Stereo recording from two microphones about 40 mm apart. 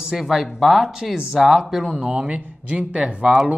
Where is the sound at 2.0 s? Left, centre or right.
Right.